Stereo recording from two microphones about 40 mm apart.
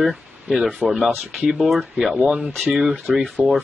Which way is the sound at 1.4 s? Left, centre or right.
Centre.